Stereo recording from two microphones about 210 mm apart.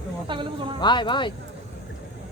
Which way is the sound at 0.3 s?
25° right (ahead or behind).